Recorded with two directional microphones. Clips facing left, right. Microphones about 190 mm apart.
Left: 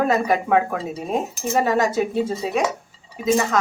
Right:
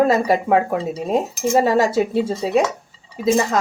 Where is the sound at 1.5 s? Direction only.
30° right (ahead or behind).